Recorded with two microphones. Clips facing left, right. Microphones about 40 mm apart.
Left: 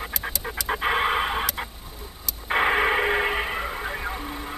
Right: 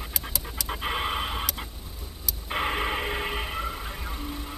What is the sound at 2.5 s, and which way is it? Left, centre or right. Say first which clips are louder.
Radio: left 7 dB; left.